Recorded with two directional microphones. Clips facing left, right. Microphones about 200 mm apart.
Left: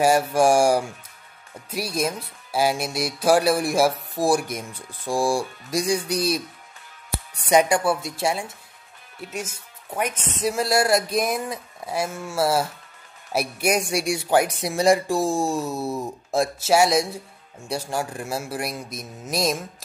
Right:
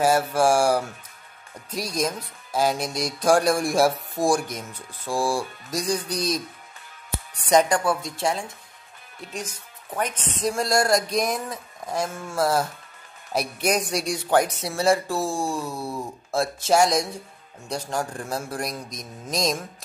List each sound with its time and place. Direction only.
0.0 s speech: 15° left (ahead or behind)
9.9 s speech: 10° left (ahead or behind)
16.5 s speech: 10° left (ahead or behind)